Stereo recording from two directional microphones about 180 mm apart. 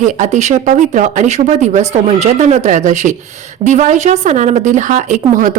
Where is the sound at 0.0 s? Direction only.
40° right (ahead or behind).